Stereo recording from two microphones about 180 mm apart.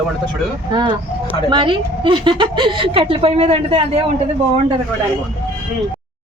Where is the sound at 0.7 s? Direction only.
25° right (ahead or behind).